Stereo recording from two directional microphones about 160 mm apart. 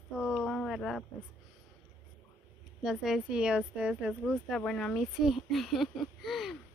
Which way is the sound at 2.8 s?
Centre (ahead or behind).